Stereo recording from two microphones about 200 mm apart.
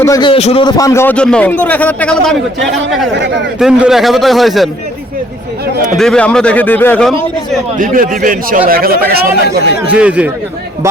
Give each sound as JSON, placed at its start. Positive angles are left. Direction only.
{"t": 0.0, "sound": "a man's voice", "side_deg": 20}
{"t": 0.8, "sound": "a man's voice", "side_deg": 15}
{"t": 3.2, "sound": "speech", "side_deg": -60}
{"t": 3.6, "sound": "a man's voice", "side_deg": -5}
{"t": 5.7, "sound": "a man's voice", "side_deg": -40}
{"t": 6.0, "sound": "a man's voice", "side_deg": 5}
{"t": 7.8, "sound": "a man's voice", "side_deg": -45}
{"t": 9.8, "sound": "speech", "side_deg": -5}